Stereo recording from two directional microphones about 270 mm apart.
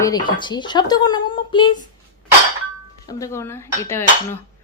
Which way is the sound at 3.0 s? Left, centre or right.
Centre.